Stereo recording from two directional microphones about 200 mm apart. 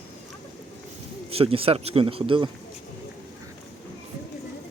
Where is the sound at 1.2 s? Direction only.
30° right (ahead or behind).